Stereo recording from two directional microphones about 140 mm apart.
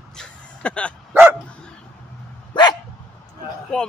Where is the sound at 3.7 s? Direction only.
5° left (ahead or behind).